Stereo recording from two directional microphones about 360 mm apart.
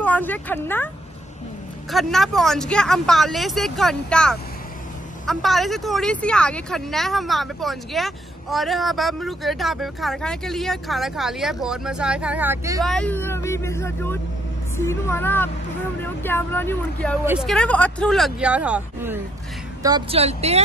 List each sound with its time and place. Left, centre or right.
0.0 s speech: centre
1.9 s speech: centre
12.9 s speech: centre